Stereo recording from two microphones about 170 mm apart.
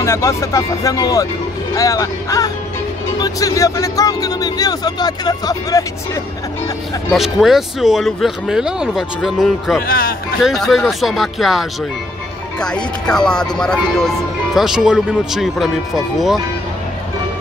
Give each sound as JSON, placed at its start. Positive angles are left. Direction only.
{"t": 0.0, "sound": "speech", "side_deg": 15}
{"t": 7.1, "sound": "speech", "side_deg": 0}
{"t": 9.8, "sound": "speech", "side_deg": 60}
{"t": 10.4, "sound": "speech", "side_deg": 0}